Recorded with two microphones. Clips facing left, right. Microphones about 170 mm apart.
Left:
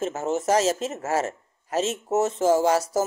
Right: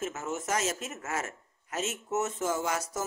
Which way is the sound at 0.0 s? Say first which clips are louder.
Left 9 dB; 30° left (ahead or behind).